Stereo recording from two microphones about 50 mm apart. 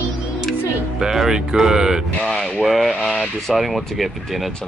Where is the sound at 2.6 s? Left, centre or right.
Centre.